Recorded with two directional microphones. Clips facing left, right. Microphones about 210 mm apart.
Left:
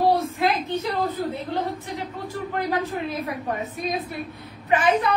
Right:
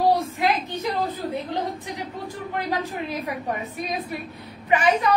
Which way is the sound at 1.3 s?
15° right (ahead or behind).